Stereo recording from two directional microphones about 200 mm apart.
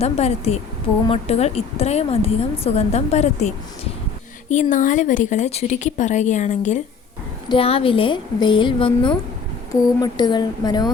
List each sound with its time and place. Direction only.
0.0 s a woman's voice: 30° left (ahead or behind)